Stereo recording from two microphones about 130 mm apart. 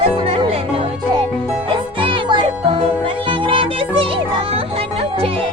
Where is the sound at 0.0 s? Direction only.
50° right (ahead or behind).